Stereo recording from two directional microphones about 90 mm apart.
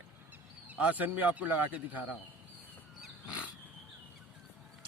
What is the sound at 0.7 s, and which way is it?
Speech, 15° right (ahead or behind).